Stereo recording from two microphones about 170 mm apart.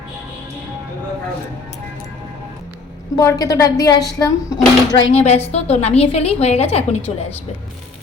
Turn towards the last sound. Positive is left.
turn(degrees=40)  # may be behind; listen again after turning